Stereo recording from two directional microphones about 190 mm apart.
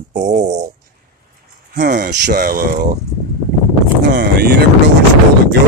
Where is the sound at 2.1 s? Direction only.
55° right (ahead or behind).